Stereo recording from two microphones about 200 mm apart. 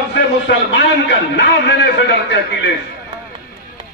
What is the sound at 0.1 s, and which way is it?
A man's voice, 60° left (ahead or behind).